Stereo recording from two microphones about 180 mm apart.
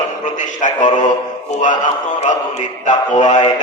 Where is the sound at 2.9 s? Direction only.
40° left (ahead or behind).